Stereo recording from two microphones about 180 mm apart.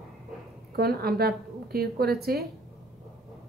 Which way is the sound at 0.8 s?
60° right (ahead or behind).